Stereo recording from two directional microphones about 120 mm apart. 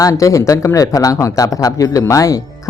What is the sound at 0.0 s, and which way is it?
Speech, 25° left (ahead or behind).